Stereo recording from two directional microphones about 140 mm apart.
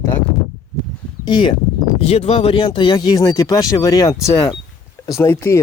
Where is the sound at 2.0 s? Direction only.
45° left (ahead or behind).